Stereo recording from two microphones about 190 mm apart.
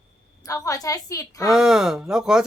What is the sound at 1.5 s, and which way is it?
Speech, 5° right (ahead or behind).